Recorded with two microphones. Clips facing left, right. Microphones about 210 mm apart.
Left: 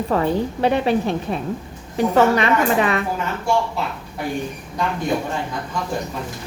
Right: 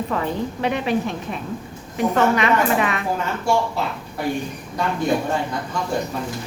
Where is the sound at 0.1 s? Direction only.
35° left (ahead or behind).